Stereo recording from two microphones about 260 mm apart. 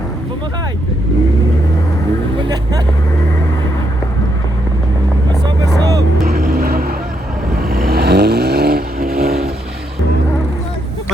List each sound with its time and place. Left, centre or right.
2.4 s vehicle: centre
6.2 s vehicle: right